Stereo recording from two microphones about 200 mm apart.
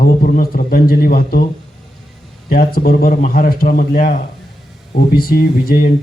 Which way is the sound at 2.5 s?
45° left (ahead or behind).